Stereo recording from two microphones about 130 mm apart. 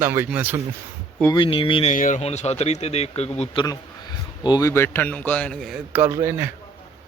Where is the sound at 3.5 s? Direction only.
30° left (ahead or behind).